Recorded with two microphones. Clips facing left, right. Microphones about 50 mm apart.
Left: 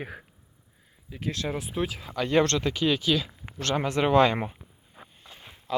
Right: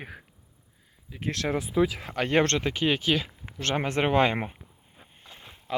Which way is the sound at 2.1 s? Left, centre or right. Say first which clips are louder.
Left 4 dB; right.